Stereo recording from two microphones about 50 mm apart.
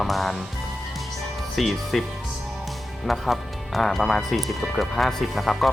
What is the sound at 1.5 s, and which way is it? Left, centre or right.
Speech, centre.